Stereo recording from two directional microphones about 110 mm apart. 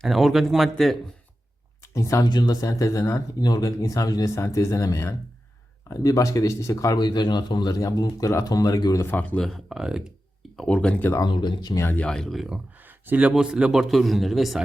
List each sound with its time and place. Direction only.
0.0 s a man's voice: centre (ahead or behind)
1.8 s speech: 25° left (ahead or behind)
2.2 s speech: 40° left (ahead or behind)
7.0 s speech: 40° left (ahead or behind)
9.0 s speech: 15° left (ahead or behind)
9.4 s a man's voice: centre (ahead or behind)
10.6 s speech: 10° left (ahead or behind)
11.3 s speech: 45° left (ahead or behind)
11.8 s speech: 20° left (ahead or behind)
12.0 s a man's voice: 5° left (ahead or behind)
12.8 s a man's voice: 15° right (ahead or behind); by 14.6 s centre (ahead or behind)